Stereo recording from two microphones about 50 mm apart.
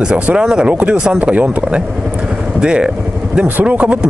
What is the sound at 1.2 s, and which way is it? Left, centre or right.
Speech, right.